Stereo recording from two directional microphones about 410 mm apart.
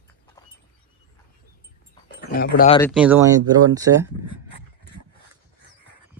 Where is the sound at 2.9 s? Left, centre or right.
Centre.